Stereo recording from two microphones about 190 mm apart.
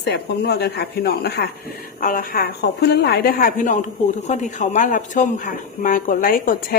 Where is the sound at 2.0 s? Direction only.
45° left (ahead or behind).